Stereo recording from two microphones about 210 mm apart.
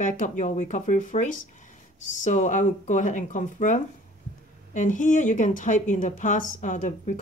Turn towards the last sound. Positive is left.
turn(degrees=35)  # may be behind; listen again after turning